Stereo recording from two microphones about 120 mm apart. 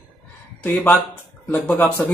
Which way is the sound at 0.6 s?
15° left (ahead or behind).